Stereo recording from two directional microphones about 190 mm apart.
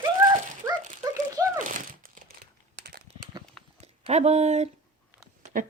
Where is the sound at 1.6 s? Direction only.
45° right (ahead or behind).